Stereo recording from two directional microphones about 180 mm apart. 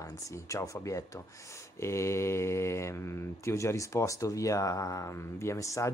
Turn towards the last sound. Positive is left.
turn(degrees=15)  # may be behind; listen again after turning